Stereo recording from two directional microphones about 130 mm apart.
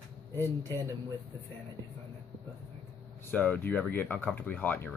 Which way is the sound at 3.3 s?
15° left (ahead or behind).